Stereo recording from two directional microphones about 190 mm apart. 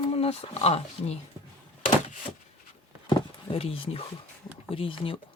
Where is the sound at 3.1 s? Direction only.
30° left (ahead or behind).